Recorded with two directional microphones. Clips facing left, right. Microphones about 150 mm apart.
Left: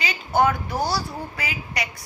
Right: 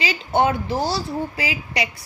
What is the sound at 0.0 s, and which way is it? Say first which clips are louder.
A woman's voice: right 1 dB; 25° right (ahead or behind).